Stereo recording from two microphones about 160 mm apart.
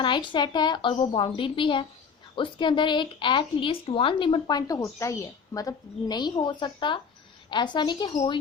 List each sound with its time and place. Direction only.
0.0 s a woman's voice: 30° left (ahead or behind)